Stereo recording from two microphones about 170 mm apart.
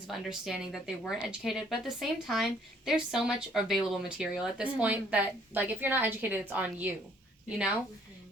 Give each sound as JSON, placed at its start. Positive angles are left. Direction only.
{"t": 0.1, "sound": "speech", "side_deg": 0}